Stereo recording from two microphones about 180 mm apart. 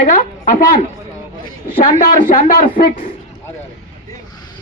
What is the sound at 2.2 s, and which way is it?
Speech, 50° left (ahead or behind).